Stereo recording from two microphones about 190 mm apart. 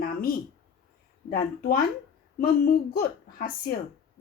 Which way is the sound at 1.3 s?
50° left (ahead or behind).